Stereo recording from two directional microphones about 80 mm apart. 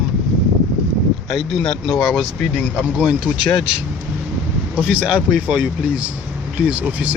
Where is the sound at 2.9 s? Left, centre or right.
Centre.